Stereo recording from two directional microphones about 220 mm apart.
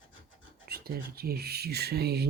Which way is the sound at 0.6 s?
45° right (ahead or behind).